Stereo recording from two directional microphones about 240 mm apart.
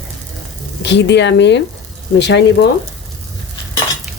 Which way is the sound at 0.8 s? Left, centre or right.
Left.